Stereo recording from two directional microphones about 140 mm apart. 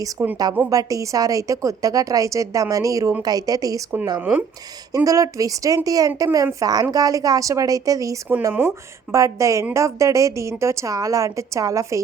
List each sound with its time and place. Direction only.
0.0 s a woman's voice: 25° right (ahead or behind)
4.2 s speech: 10° right (ahead or behind)
4.9 s a woman's voice: 25° right (ahead or behind)